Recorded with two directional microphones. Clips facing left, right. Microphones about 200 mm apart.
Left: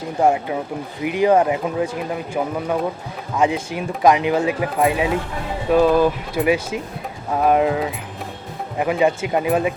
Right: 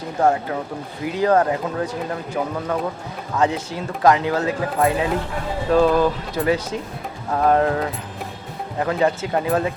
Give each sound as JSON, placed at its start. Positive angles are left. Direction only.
{"t": 0.2, "sound": "speech", "side_deg": 15}